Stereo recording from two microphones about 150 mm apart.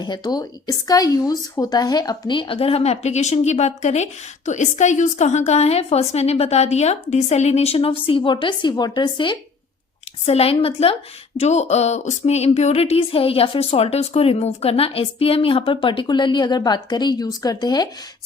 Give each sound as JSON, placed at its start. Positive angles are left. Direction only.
{"t": 0.0, "sound": "speech", "side_deg": 30}